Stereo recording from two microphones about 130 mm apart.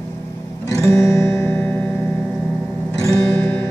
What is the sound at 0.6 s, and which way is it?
Music, 20° left (ahead or behind).